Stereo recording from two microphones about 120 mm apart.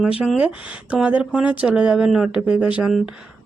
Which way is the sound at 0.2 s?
10° right (ahead or behind).